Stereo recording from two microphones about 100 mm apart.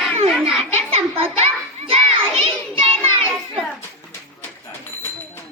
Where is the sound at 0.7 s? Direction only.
90° right.